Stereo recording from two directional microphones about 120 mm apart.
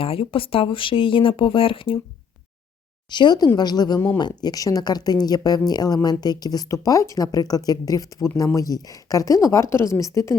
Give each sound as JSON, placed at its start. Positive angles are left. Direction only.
{"t": 0.0, "sound": "speech", "side_deg": 50}
{"t": 3.1, "sound": "a woman's voice", "side_deg": 40}